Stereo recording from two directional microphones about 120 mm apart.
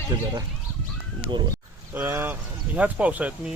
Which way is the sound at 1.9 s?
15° right (ahead or behind).